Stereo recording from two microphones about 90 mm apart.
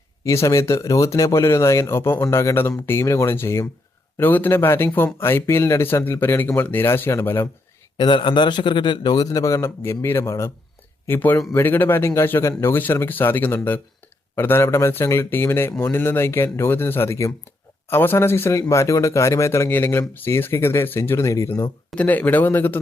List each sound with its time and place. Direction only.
0.3 s speech: 35° left (ahead or behind)
7.9 s a man's voice: 60° left (ahead or behind); by 12.7 s 35° left (ahead or behind)
12.7 s speech: 25° left (ahead or behind)
21.9 s speech: 20° left (ahead or behind)